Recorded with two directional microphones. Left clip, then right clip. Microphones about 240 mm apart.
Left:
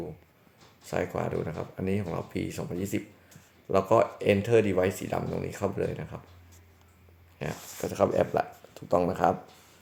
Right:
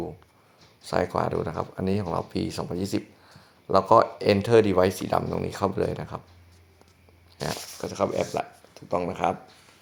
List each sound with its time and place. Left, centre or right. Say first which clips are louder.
0.9 s speech: right 5 dB; centre
7.8 s speech: left 2 dB; centre